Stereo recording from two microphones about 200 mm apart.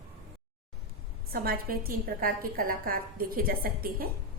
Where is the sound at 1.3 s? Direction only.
50° right (ahead or behind).